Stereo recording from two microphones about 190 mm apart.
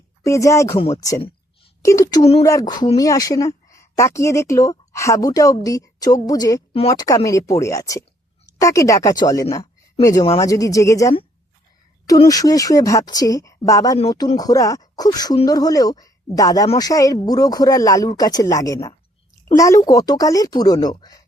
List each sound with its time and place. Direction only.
0.2 s speech: 15° left (ahead or behind)